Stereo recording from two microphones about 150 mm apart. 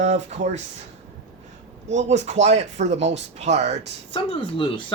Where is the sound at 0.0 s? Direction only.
50° right (ahead or behind).